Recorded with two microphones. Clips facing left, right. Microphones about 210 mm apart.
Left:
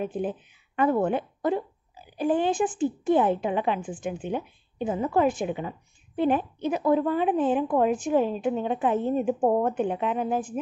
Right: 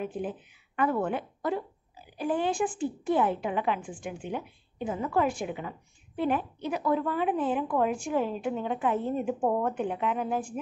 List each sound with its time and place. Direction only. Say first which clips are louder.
0.0 s a woman's voice: left 4 dB; 25° left (ahead or behind)